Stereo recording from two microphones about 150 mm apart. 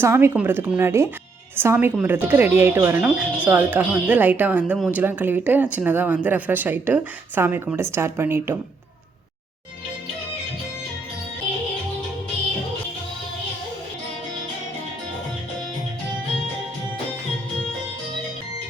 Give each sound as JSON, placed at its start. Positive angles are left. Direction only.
{"t": 0.0, "sound": "speech", "side_deg": -15}